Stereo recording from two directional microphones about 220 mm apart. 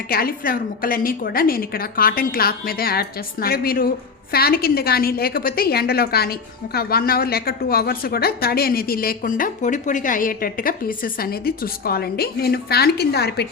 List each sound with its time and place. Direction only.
0.1 s a woman's voice: 40° left (ahead or behind)